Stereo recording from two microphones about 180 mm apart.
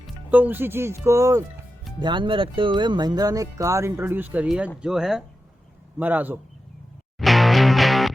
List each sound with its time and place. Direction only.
0.3 s speech: 10° right (ahead or behind)
7.2 s music: centre (ahead or behind)